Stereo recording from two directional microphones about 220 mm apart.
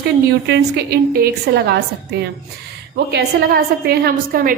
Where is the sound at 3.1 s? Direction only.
45° right (ahead or behind).